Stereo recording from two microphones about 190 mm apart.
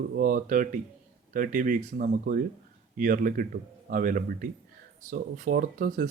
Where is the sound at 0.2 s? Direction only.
45° right (ahead or behind).